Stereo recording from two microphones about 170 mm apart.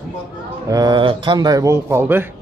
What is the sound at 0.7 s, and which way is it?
Speech, 25° right (ahead or behind).